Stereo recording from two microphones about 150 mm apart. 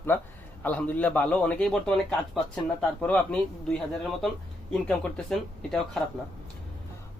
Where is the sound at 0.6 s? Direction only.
10° left (ahead or behind).